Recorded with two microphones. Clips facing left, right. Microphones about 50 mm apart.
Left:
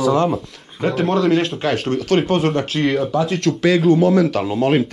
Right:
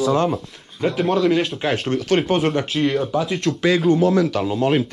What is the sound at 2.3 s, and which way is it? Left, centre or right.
Speech, right.